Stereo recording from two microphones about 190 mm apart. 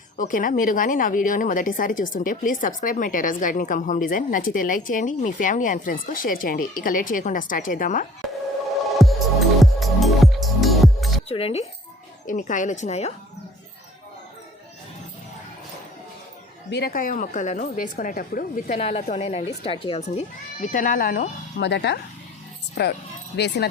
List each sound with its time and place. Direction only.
0.2 s a woman's voice: 45° left (ahead or behind)
8.9 s music: centre (ahead or behind)
11.3 s speech: 30° left (ahead or behind)
12.2 s speech: 45° left (ahead or behind)
16.6 s a woman's voice: 60° left (ahead or behind)
22.7 s speech: 55° left (ahead or behind)